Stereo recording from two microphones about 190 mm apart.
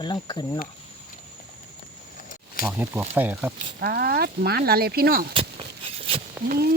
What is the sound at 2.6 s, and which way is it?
Speech, 10° right (ahead or behind).